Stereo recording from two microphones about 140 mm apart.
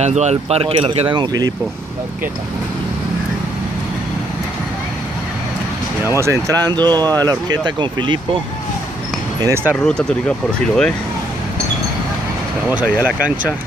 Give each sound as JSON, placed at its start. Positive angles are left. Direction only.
{"t": 0.0, "sound": "speech", "side_deg": -55}
{"t": 6.0, "sound": "speech", "side_deg": -20}
{"t": 9.4, "sound": "speech", "side_deg": -15}
{"t": 9.8, "sound": "speech", "side_deg": 5}
{"t": 12.7, "sound": "speech", "side_deg": -10}